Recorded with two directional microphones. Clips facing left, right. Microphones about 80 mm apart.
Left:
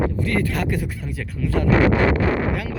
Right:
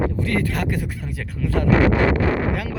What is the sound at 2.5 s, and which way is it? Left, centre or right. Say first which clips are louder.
Speech: even; right.